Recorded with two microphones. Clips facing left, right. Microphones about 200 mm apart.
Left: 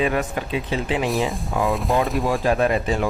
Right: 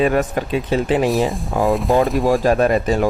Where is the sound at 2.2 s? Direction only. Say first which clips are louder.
Right 5 dB; 45° right (ahead or behind).